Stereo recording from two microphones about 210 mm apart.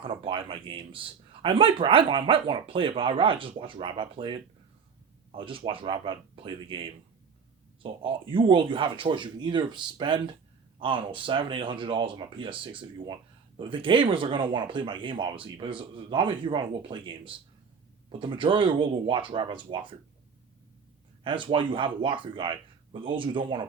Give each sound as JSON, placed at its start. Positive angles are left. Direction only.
{"t": 0.0, "sound": "speech", "side_deg": -25}
{"t": 18.2, "sound": "speech", "side_deg": -25}
{"t": 21.2, "sound": "speech", "side_deg": -25}